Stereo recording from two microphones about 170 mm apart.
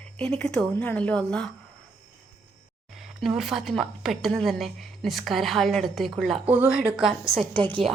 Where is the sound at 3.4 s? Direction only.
Centre (ahead or behind).